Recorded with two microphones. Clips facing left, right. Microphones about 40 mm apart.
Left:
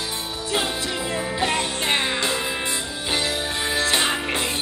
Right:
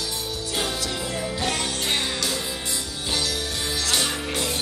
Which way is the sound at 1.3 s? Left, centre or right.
Left.